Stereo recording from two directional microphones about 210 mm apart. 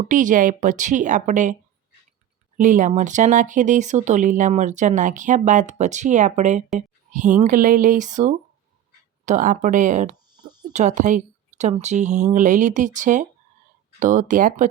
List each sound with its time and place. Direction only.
0.0 s speech: 40° right (ahead or behind)
2.6 s speech: 35° right (ahead or behind)
10.3 s a sound: 20° right (ahead or behind)
10.7 s speech: 35° right (ahead or behind)